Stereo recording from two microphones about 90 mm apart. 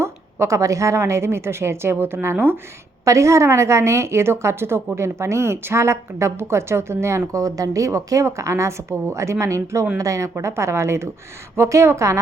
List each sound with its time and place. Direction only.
0.0 s a woman's voice: 30° right (ahead or behind)
3.0 s a woman's voice: 35° right (ahead or behind)